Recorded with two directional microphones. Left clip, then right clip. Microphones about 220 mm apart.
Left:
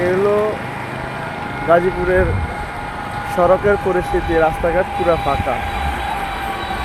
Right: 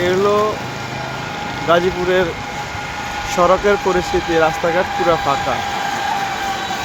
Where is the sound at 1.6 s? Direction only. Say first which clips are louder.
Left 1 dB; 5° right (ahead or behind).